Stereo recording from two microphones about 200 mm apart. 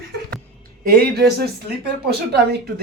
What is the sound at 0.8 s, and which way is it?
Speech, 45° right (ahead or behind).